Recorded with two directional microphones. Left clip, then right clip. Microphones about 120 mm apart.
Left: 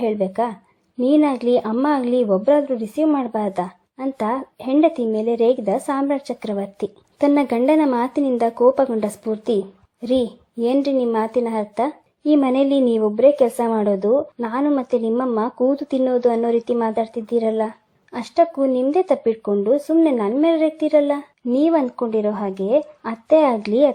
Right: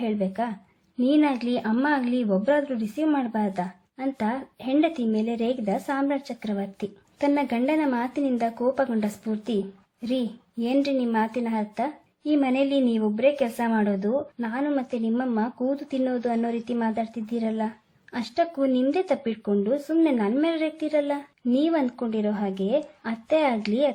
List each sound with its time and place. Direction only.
0.0 s a woman's voice: 25° left (ahead or behind)